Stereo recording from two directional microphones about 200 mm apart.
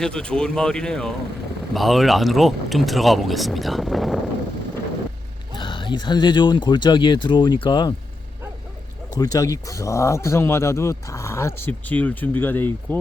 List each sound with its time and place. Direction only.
0.0 s speech: 5° left (ahead or behind)
5.5 s speech: 25° left (ahead or behind)
9.1 s speech: 20° left (ahead or behind)